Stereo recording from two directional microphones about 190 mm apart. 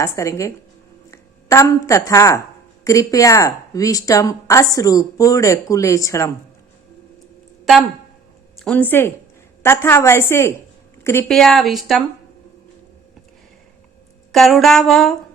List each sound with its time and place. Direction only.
0.0 s speech: 15° left (ahead or behind)
7.6 s a woman's voice: centre (ahead or behind)
11.3 s a woman's voice: centre (ahead or behind)
14.3 s a woman's voice: centre (ahead or behind)